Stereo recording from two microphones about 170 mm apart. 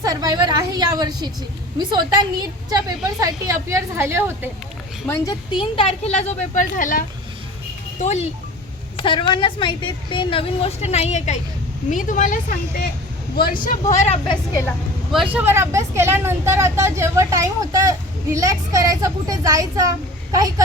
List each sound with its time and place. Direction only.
0.0 s a woman's voice: 20° right (ahead or behind)
5.0 s a woman's voice: 20° left (ahead or behind); by 7.0 s 50° left (ahead or behind)
8.0 s a woman's voice: 40° left (ahead or behind)
9.0 s a woman's voice: 30° left (ahead or behind); by 12.9 s 55° left (ahead or behind)
13.7 s a woman's voice: 45° left (ahead or behind)
14.3 s a woman's voice: 20° left (ahead or behind)
15.1 s speech: 5° right (ahead or behind)